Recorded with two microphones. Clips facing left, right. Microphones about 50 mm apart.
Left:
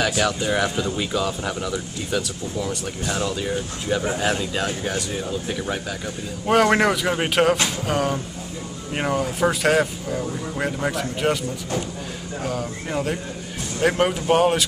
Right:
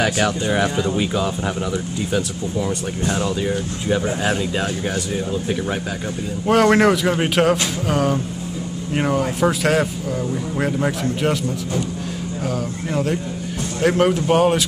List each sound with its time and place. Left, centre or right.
0.0 s speech: right; by 11.3 s centre
12.4 s speech: centre